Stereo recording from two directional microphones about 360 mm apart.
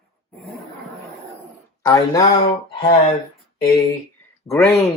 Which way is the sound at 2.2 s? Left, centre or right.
Left.